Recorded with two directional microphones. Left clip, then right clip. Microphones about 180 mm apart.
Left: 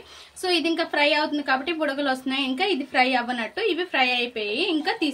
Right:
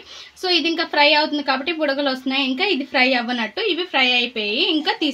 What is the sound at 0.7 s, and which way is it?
A woman's voice, 45° right (ahead or behind).